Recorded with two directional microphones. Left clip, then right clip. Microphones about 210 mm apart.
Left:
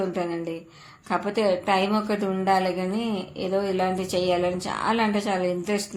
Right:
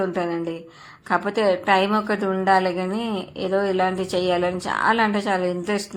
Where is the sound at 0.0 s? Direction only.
15° right (ahead or behind).